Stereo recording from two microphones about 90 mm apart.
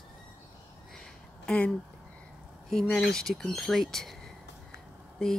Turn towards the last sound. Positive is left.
turn(degrees=5)  # may be behind; listen again after turning